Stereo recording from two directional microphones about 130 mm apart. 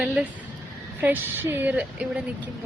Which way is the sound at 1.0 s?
15° right (ahead or behind).